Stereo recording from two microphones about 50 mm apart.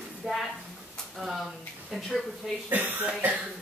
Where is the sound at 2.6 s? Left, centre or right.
Right.